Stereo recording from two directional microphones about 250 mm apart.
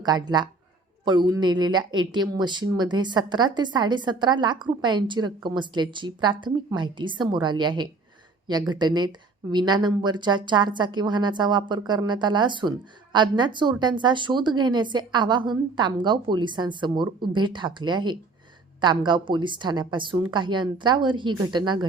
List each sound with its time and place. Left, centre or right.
0.0 s a woman's voice: centre